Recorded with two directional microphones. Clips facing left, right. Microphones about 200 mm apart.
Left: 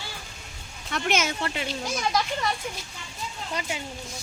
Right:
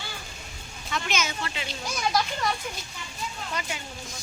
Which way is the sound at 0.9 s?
65° left (ahead or behind).